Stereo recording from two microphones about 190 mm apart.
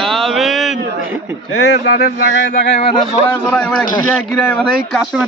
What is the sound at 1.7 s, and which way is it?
Speech, 65° left (ahead or behind).